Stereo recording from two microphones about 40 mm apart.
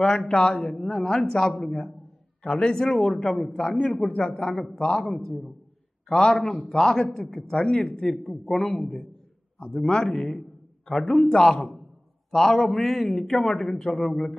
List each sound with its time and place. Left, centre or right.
0.3 s a man's voice: left
4.9 s a man's voice: centre